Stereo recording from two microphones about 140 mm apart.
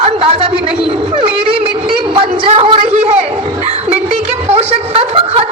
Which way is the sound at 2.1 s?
40° right (ahead or behind).